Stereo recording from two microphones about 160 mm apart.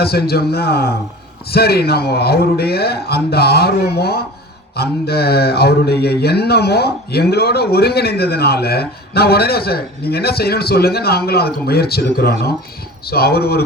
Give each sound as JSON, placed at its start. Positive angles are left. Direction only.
{"t": 0.0, "sound": "a man's voice", "side_deg": 80}
{"t": 1.5, "sound": "a sound", "side_deg": 80}
{"t": 13.1, "sound": "a man's voice", "side_deg": 75}